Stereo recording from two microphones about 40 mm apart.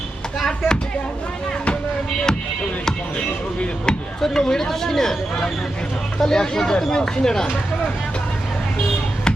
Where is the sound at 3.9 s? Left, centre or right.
Left.